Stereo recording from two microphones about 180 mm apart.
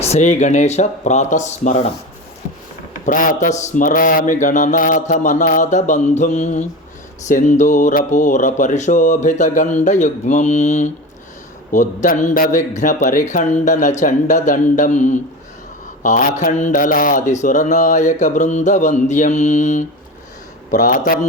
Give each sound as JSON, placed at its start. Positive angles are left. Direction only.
{"t": 0.0, "sound": "speech", "side_deg": 40}
{"t": 3.1, "sound": "speech", "side_deg": 50}